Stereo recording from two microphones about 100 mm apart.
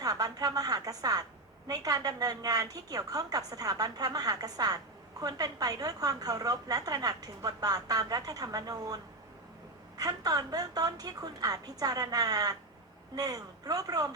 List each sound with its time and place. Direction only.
0.0 s a woman's voice: 40° right (ahead or behind)
10.0 s a woman's voice: 35° right (ahead or behind)